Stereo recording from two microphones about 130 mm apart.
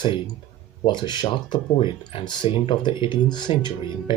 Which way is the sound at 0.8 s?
35° left (ahead or behind).